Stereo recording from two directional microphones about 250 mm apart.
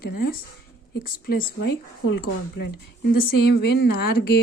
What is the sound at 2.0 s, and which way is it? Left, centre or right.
Speech, left.